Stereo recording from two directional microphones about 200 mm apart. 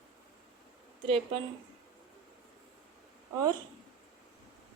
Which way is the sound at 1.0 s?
25° right (ahead or behind).